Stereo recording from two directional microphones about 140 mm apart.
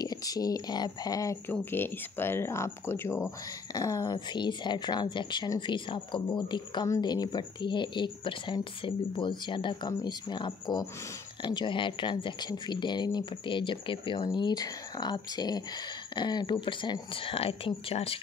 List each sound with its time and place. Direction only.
0.0 s a woman's voice: 25° left (ahead or behind); by 18.2 s 45° left (ahead or behind)